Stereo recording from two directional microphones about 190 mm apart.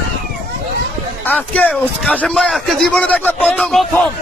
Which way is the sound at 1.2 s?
10° left (ahead or behind).